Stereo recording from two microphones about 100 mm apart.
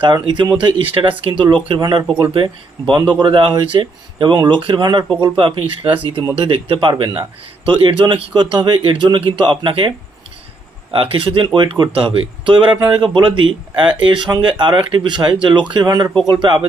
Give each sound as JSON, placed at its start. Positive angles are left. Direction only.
{"t": 0.0, "sound": "speech", "side_deg": -50}
{"t": 5.4, "sound": "speech", "side_deg": -65}
{"t": 10.9, "sound": "speech", "side_deg": -60}